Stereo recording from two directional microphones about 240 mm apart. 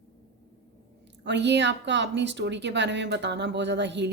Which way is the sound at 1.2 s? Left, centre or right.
Right.